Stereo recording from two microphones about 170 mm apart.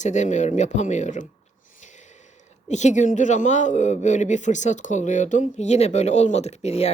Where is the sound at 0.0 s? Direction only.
45° left (ahead or behind).